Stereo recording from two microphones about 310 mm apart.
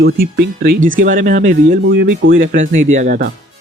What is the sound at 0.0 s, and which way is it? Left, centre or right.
Speech, right.